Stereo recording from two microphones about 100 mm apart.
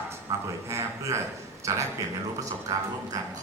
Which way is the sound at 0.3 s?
30° right (ahead or behind).